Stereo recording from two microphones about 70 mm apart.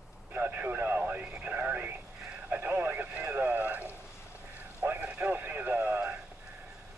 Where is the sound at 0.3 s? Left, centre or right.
Right.